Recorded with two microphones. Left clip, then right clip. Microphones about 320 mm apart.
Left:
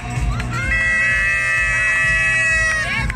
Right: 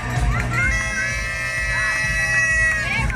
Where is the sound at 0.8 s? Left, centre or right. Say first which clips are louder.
Left 7 dB; left.